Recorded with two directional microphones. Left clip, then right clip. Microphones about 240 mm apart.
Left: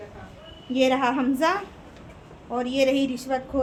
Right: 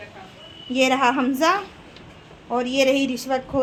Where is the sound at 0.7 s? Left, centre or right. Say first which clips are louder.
Right 3 dB; right.